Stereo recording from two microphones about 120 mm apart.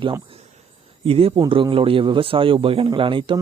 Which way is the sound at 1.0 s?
50° right (ahead or behind).